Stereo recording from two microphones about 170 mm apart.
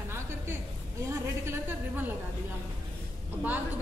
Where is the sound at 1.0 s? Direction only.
15° right (ahead or behind).